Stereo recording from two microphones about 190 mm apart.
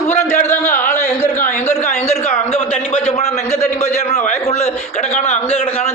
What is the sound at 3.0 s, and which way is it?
A man's voice, 35° left (ahead or behind).